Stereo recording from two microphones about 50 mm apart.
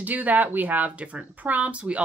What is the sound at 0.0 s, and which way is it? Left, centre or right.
Speech, right.